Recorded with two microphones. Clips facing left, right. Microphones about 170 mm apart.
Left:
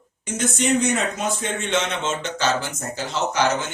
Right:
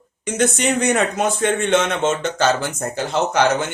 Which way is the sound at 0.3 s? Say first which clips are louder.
Right 3 dB; 65° right (ahead or behind).